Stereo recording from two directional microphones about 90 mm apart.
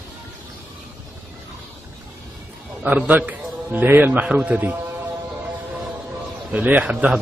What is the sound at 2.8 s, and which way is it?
A man's voice, 15° right (ahead or behind).